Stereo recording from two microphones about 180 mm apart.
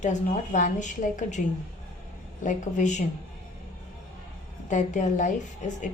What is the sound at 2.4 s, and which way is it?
Speech, 40° left (ahead or behind).